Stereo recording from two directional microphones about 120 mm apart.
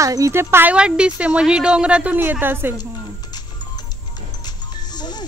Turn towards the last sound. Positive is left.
turn(degrees=35)  # may be behind; listen again after turning